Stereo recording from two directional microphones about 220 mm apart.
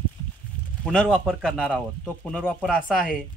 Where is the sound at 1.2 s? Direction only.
5° left (ahead or behind).